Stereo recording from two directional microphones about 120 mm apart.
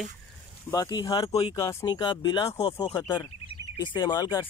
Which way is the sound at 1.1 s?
50° left (ahead or behind).